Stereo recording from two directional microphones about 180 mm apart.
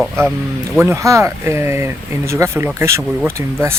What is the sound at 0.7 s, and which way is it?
Speech, 15° right (ahead or behind).